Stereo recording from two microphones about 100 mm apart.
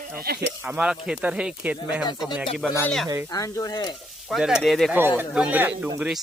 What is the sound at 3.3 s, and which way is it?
Sizzle, 35° left (ahead or behind).